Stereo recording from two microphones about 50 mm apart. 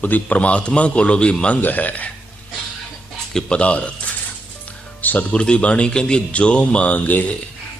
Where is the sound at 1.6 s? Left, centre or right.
Left.